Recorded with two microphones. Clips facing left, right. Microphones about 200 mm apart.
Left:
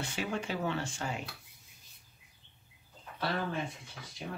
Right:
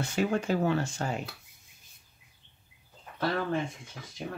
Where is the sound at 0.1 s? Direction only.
45° right (ahead or behind).